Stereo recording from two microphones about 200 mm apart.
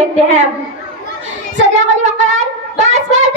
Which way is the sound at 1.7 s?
35° right (ahead or behind).